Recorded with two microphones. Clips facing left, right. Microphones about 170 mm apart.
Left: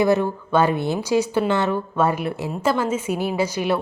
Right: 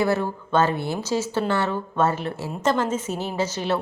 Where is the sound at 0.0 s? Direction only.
15° left (ahead or behind).